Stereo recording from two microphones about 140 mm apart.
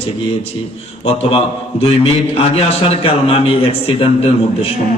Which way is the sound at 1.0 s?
45° left (ahead or behind).